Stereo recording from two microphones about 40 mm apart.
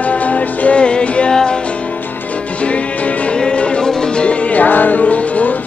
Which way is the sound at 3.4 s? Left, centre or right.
Left.